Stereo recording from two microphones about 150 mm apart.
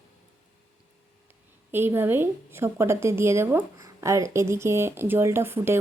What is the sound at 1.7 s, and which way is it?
Speech, 15° right (ahead or behind).